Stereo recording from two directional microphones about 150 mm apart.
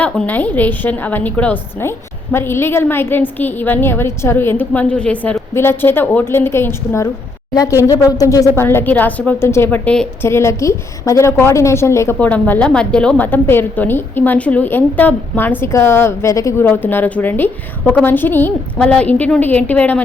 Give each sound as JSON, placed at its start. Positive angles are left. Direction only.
{"t": 0.0, "sound": "a woman's voice", "side_deg": 10}
{"t": 10.2, "sound": "a woman's voice", "side_deg": 20}